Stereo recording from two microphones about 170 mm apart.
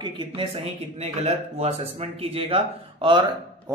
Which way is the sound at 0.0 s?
25° right (ahead or behind).